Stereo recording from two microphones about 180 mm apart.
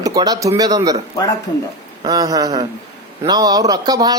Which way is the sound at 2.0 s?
20° right (ahead or behind).